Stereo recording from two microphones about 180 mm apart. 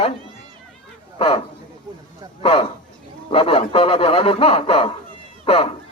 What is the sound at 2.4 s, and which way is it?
A man's voice, 30° left (ahead or behind).